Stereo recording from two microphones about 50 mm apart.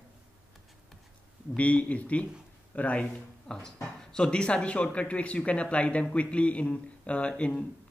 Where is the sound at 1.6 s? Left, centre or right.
Left.